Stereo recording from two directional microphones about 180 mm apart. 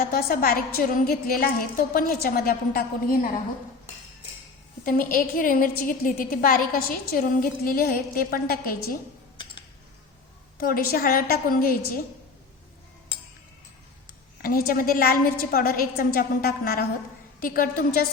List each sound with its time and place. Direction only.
0.0 s a woman's voice: 55° left (ahead or behind)
4.9 s a woman's voice: 50° left (ahead or behind)
10.7 s a woman's voice: 55° left (ahead or behind)
14.4 s a woman's voice: 55° left (ahead or behind)